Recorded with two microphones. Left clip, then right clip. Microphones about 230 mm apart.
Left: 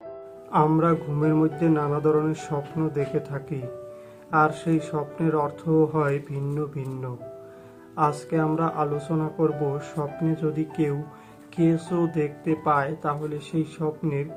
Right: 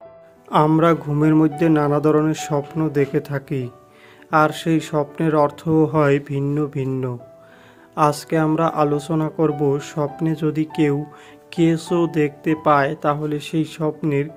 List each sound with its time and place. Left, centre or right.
0.5 s speech: right